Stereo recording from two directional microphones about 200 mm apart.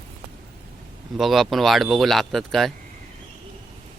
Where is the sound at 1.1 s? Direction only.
Centre (ahead or behind).